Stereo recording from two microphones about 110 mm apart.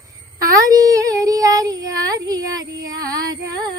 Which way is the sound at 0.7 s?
35° right (ahead or behind).